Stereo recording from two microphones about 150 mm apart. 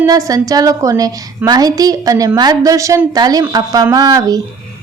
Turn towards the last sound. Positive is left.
turn(degrees=-25)  # may be behind; listen again after turning